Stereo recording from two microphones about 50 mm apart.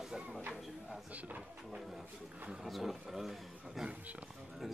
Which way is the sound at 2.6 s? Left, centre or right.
Centre.